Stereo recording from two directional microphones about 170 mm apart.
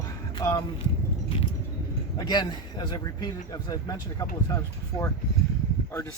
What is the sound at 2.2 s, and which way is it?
A man's voice, 25° left (ahead or behind).